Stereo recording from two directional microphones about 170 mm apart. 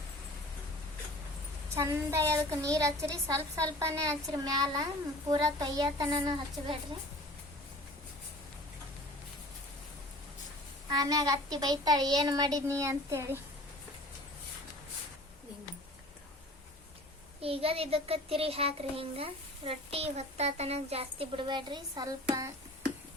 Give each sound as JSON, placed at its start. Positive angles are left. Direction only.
{"t": 1.7, "sound": "a woman's voice", "side_deg": -15}
{"t": 10.8, "sound": "a woman's voice", "side_deg": -20}
{"t": 17.4, "sound": "a child's voice", "side_deg": -35}